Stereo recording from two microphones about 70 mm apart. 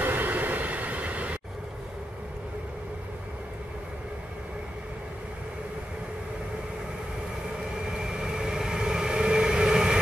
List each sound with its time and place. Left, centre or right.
0.0 s vehicle: right
8.0 s train: centre